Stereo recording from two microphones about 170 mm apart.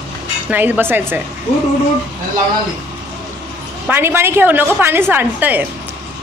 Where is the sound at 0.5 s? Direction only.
10° right (ahead or behind).